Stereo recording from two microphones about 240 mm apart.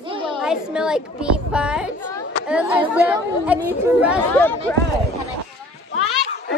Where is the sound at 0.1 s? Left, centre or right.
Right.